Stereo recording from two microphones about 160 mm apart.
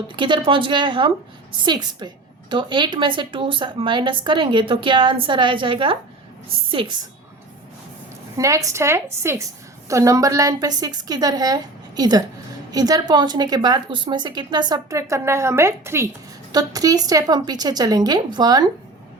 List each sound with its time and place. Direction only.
0.2 s a woman's voice: 30° right (ahead or behind)
8.4 s a woman's voice: 20° right (ahead or behind)